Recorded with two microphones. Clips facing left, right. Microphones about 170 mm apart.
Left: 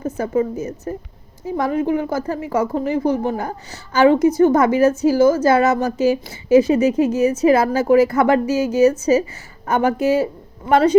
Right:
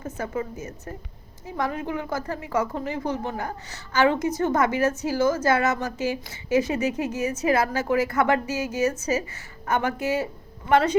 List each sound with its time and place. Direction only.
0.0 s a woman's voice: 30° left (ahead or behind)